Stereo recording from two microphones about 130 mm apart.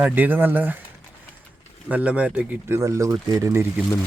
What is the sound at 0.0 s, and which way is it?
Speech, 15° right (ahead or behind).